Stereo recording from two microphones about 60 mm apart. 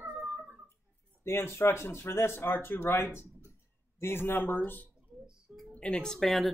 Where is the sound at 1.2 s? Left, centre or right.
Left.